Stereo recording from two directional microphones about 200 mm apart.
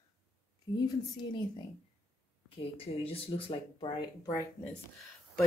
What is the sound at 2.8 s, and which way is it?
Speech, 30° left (ahead or behind).